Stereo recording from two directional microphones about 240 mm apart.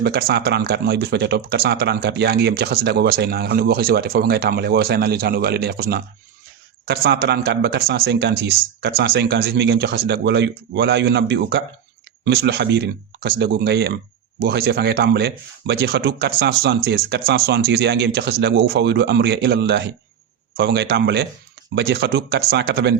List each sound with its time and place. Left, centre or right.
0.0 s speech: right